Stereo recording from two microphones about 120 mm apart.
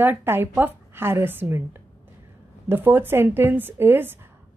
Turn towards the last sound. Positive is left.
turn(degrees=-15)  # may be behind; listen again after turning